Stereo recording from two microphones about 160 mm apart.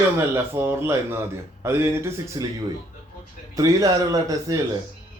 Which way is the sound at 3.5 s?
20° right (ahead or behind).